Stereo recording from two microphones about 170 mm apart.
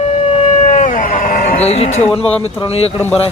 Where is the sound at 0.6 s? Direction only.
50° left (ahead or behind).